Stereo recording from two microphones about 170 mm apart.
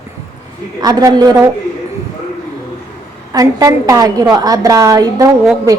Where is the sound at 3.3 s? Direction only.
20° right (ahead or behind).